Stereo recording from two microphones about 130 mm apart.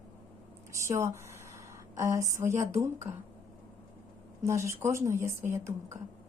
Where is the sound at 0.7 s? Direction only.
20° right (ahead or behind).